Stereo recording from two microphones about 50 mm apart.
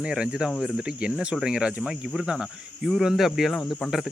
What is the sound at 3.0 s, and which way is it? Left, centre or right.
Speech, centre.